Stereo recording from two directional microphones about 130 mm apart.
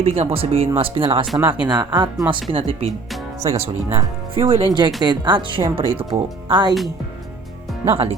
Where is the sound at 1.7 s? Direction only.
30° right (ahead or behind).